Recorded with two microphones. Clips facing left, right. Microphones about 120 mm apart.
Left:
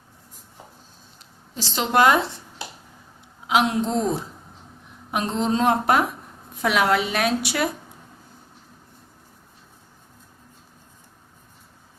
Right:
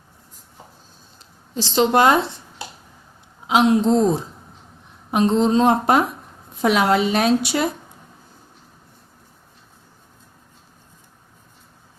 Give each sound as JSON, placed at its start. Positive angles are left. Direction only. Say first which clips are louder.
{"t": 1.5, "sound": "a woman's voice", "louder": "right 4 dB", "side_deg": -25}
{"t": 3.4, "sound": "a woman's voice", "louder": "right 5 dB", "side_deg": -25}